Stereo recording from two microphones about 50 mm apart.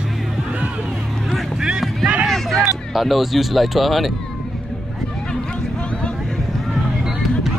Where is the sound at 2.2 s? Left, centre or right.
Centre.